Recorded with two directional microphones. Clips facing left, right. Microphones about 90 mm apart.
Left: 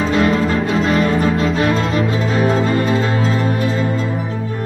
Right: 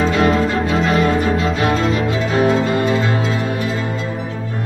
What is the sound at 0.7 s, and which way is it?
Music, centre (ahead or behind).